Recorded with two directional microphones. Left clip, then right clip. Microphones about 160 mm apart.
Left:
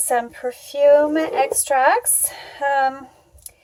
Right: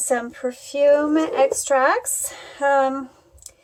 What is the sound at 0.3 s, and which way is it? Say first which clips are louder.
A woman's voice: even; 10° right (ahead or behind).